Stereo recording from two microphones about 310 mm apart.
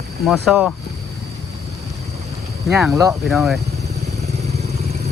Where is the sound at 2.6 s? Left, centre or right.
Centre.